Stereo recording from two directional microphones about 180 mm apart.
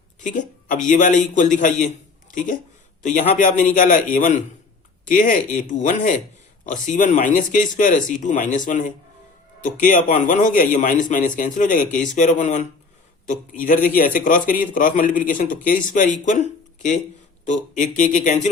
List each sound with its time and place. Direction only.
0.2 s a man's voice: 45° left (ahead or behind)